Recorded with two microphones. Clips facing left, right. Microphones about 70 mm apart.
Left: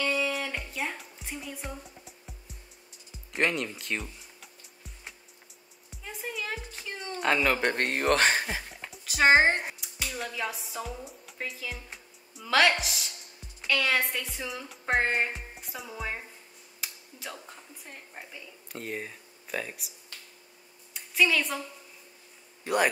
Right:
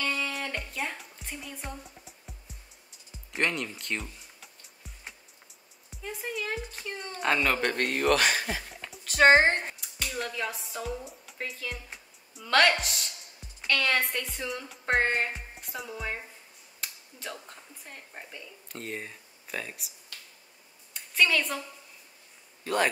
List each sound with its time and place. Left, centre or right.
0.0 s music: centre
5.9 s speech: centre
7.8 s speech: left
8.5 s music: centre
8.9 s speech: centre
16.8 s a sound: centre
17.8 s speech: centre
20.9 s a sound: centre
22.6 s a man's voice: centre